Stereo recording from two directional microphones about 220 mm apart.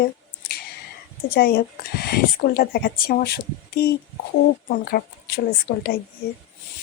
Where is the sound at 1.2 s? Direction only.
45° left (ahead or behind).